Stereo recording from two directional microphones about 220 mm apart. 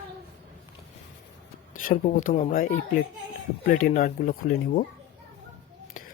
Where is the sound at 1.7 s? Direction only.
40° left (ahead or behind).